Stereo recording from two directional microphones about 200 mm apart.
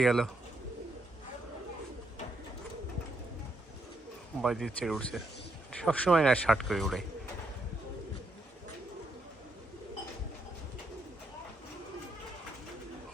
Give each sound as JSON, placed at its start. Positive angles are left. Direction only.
{"t": 0.0, "sound": "speech", "side_deg": 5}
{"t": 4.4, "sound": "speech", "side_deg": 0}